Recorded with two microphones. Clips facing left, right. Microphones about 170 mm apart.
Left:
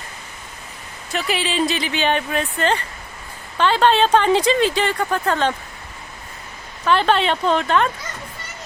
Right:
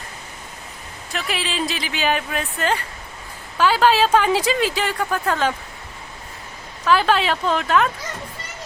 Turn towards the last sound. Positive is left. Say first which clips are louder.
# left 1 dB
turn(degrees=-5)  # may be behind; listen again after turning